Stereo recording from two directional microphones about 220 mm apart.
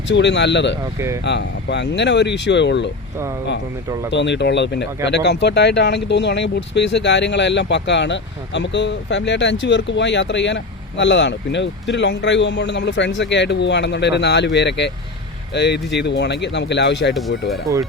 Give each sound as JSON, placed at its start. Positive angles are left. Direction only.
{"t": 0.1, "sound": "speech", "side_deg": 55}
{"t": 4.1, "sound": "speech", "side_deg": 55}